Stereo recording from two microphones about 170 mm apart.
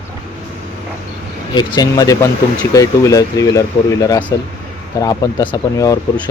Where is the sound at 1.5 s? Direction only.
25° left (ahead or behind).